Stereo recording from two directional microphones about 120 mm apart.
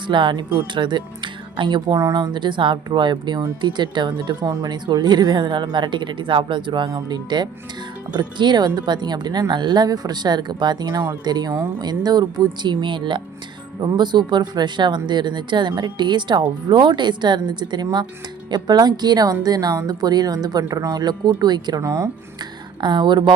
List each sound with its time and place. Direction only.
0.1 s speech: 40° right (ahead or behind)
21.8 s speech: 25° right (ahead or behind)
22.8 s speech: 40° right (ahead or behind)